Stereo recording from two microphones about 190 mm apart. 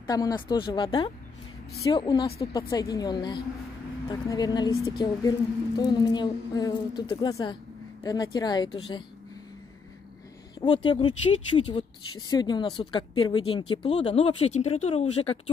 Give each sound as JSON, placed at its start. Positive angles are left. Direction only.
{"t": 0.0, "sound": "speech", "side_deg": 20}
{"t": 10.6, "sound": "speech", "side_deg": 25}